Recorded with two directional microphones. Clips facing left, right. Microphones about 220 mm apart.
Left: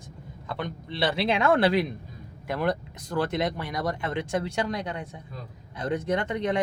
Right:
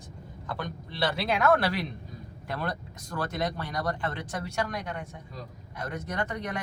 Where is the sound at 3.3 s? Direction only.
25° left (ahead or behind).